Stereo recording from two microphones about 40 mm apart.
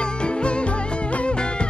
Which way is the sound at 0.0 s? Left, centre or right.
Left.